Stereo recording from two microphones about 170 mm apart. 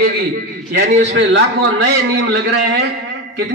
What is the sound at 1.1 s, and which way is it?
A man's voice, 90° right.